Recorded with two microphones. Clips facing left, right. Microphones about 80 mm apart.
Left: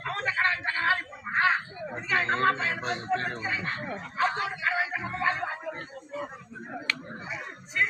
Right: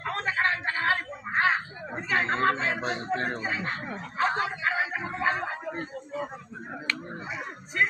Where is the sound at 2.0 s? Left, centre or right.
Right.